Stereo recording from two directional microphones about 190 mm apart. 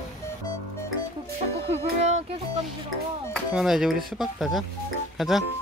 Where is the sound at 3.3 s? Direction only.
Centre (ahead or behind).